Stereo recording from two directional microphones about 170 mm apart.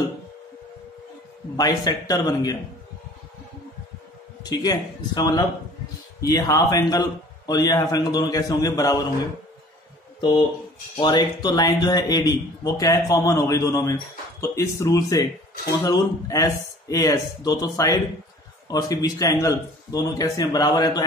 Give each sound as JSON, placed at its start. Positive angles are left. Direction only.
{"t": 1.6, "sound": "speech", "side_deg": 20}
{"t": 4.4, "sound": "speech", "side_deg": 25}
{"t": 11.0, "sound": "speech", "side_deg": 25}